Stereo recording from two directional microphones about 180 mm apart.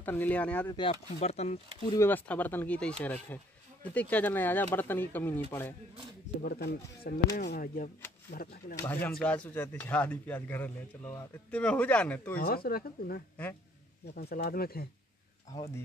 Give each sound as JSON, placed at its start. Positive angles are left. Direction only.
{"t": 0.0, "sound": "speech", "side_deg": 10}
{"t": 0.7, "sound": "speech", "side_deg": 35}
{"t": 2.0, "sound": "speech", "side_deg": 10}
{"t": 6.4, "sound": "speech", "side_deg": 60}
{"t": 8.8, "sound": "speech", "side_deg": 10}
{"t": 12.4, "sound": "speech", "side_deg": 55}
{"t": 15.5, "sound": "speech", "side_deg": 15}